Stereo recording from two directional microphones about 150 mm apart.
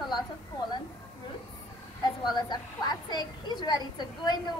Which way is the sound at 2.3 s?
30° left (ahead or behind).